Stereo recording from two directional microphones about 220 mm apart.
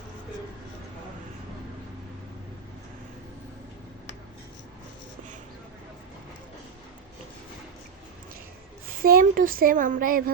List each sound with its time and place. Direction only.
9.0 s speech: 40° right (ahead or behind)